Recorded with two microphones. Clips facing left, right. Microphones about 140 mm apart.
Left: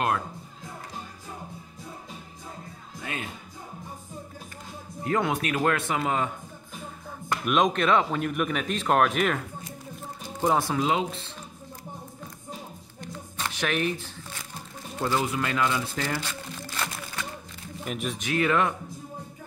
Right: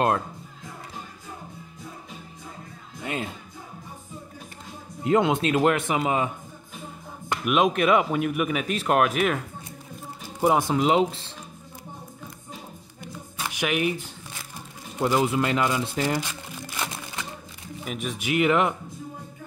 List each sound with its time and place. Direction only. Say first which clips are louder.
3.0 s music: right 5 dB; 25° right (ahead or behind)
5.0 s speech: right 5 dB; 20° right (ahead or behind)
7.4 s speech: right 2 dB; 5° right (ahead or behind)
10.4 s speech: right 3 dB; 15° right (ahead or behind); by 11.2 s 30° right (ahead or behind)
13.0 s shuffling cards: even; 10° right (ahead or behind)
15.0 s speech: right 4 dB; 15° right (ahead or behind)
17.8 s speech: even; centre (ahead or behind)
18.2 s speech: right 3 dB; 15° right (ahead or behind)